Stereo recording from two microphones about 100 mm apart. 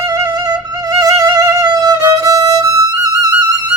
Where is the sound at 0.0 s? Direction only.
40° right (ahead or behind).